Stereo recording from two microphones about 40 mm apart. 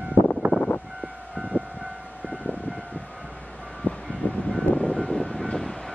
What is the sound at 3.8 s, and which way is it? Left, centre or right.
Vehicle, left.